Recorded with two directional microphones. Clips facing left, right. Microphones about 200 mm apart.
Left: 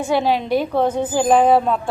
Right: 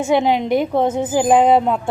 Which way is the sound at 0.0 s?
20° right (ahead or behind).